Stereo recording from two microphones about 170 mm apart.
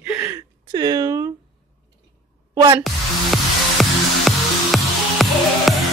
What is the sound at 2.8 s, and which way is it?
Music, centre (ahead or behind).